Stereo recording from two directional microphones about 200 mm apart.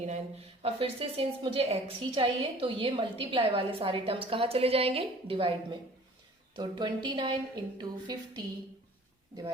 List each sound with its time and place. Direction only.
0.6 s a woman's voice: 30° right (ahead or behind)
6.6 s a woman's voice: 20° right (ahead or behind)